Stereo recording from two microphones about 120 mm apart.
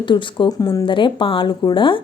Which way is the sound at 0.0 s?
45° left (ahead or behind).